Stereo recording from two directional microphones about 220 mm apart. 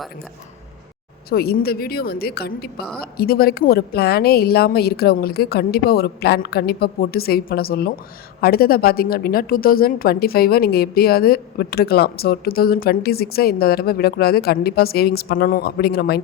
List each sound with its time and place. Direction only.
1.3 s a woman's voice: 45° left (ahead or behind)